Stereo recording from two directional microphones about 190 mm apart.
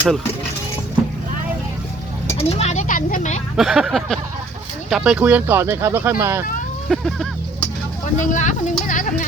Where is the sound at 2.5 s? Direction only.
35° left (ahead or behind).